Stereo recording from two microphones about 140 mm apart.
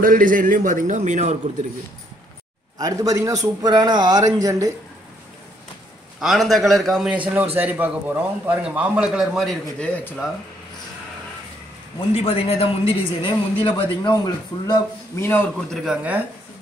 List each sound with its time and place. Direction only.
0.0 s a man's voice: 75° right (ahead or behind); by 1.4 s 55° right (ahead or behind)
2.8 s a man's voice: 25° right (ahead or behind)
6.1 s a man's voice: centre (ahead or behind)
7.5 s a man's voice: 10° right (ahead or behind)
9.9 s speech: 10° left (ahead or behind)
12.0 s a woman's voice: 45° left (ahead or behind); by 15.2 s 30° left (ahead or behind)
15.7 s a man's voice: 5° right (ahead or behind)